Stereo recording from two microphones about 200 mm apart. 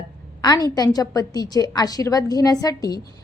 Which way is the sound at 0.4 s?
20° left (ahead or behind).